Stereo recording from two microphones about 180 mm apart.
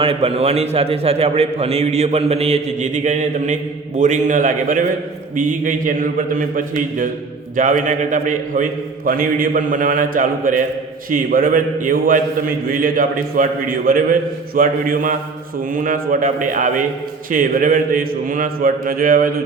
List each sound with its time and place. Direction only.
0.0 s a man's voice: 30° right (ahead or behind); by 19.3 s 50° right (ahead or behind)